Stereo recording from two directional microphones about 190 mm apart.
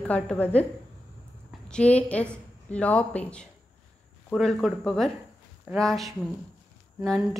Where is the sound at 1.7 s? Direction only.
5° left (ahead or behind).